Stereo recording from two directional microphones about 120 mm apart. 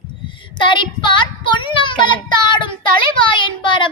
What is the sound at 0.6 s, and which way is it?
A child's voice, 40° left (ahead or behind).